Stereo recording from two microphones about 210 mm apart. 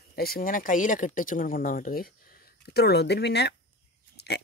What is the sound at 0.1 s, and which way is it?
Speech, 45° left (ahead or behind).